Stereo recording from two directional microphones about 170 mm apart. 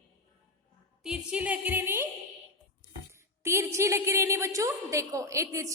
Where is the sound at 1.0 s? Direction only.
5° right (ahead or behind).